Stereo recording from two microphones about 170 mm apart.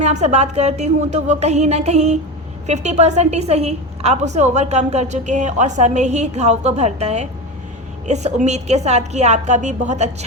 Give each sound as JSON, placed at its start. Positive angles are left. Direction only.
{"t": 0.0, "sound": "a woman's voice", "side_deg": -40}